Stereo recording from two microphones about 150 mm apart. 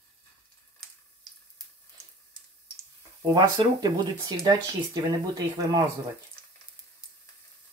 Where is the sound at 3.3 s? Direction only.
25° right (ahead or behind).